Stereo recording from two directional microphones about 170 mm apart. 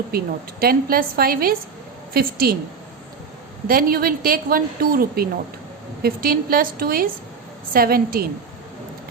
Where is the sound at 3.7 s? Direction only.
60° right (ahead or behind).